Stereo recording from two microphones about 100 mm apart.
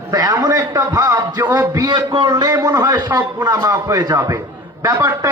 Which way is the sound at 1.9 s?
50° right (ahead or behind).